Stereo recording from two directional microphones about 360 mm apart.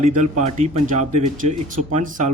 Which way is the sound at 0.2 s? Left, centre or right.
Centre.